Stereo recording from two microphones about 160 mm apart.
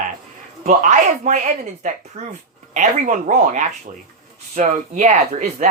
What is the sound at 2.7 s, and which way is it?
Speech, 50° right (ahead or behind).